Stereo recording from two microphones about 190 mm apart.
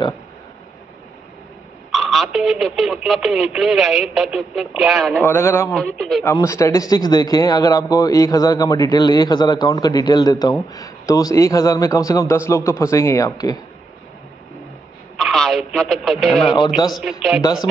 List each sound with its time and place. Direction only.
1.9 s speech: centre (ahead or behind)
5.2 s a man's voice: 15° left (ahead or behind)
5.9 s speech: centre (ahead or behind)
6.3 s a man's voice: 15° left (ahead or behind)
15.1 s speech: centre (ahead or behind)